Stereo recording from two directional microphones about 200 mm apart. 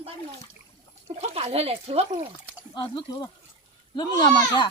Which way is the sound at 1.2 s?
30° right (ahead or behind).